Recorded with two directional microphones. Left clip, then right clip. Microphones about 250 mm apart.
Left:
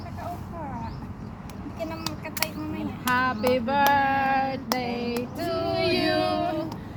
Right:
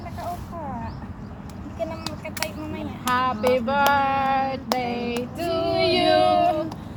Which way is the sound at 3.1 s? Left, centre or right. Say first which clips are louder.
Right 2 dB; centre.